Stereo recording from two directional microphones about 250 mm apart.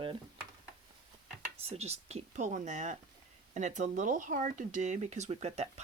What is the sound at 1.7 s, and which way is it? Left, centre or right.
Speech, right.